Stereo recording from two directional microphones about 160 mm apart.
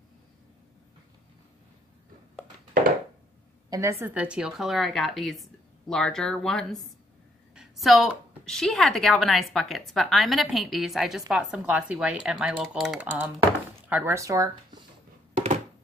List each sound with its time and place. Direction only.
3.7 s a woman's voice: 20° right (ahead or behind)
4.1 s a woman's voice: 5° right (ahead or behind)
15.3 s a sound: 45° right (ahead or behind)